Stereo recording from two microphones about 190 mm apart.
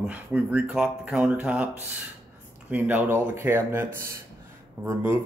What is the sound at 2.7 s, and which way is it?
Speech, 10° right (ahead or behind).